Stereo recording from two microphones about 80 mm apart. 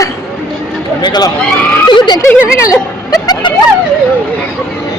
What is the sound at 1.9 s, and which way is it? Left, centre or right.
Speech, left.